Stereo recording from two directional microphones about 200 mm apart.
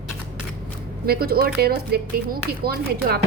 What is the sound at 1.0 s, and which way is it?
A woman's voice, 50° right (ahead or behind).